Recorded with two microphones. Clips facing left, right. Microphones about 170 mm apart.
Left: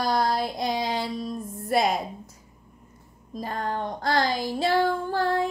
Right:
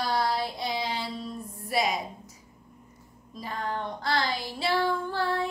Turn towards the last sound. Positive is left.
turn(degrees=45)  # may be behind; listen again after turning